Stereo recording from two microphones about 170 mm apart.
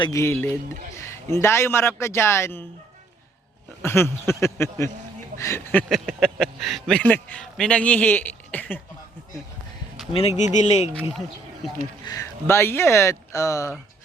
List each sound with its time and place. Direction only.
0.0 s speech: 20° left (ahead or behind)
3.8 s speech: 15° left (ahead or behind)
5.9 s speech: centre (ahead or behind)
10.1 s speech: 35° left (ahead or behind)
12.0 s speech: 20° left (ahead or behind)